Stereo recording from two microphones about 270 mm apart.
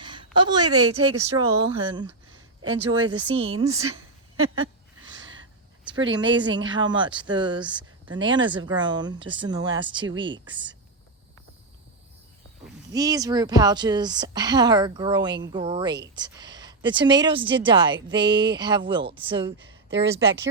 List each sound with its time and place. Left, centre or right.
0.0 s a sound: centre
0.3 s a woman's voice: centre
2.6 s speech: right
3.1 s a woman's voice: right
3.8 s a sound: right
6.1 s a woman's voice: centre
12.9 s a woman's voice: centre